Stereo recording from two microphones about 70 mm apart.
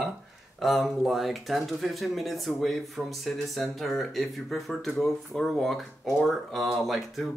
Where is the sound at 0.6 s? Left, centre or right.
Centre.